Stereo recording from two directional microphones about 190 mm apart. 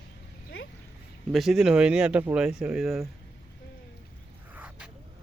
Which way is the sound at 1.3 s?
Centre (ahead or behind).